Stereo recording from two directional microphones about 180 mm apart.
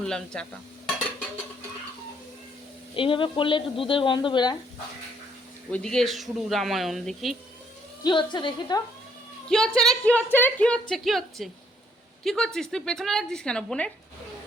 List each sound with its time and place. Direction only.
0.0 s stir: 5° left (ahead or behind)
2.9 s speech: 30° left (ahead or behind)
5.7 s a woman's voice: 5° left (ahead or behind)
8.0 s speech: 25° left (ahead or behind)
9.5 s a woman's voice: 5° left (ahead or behind)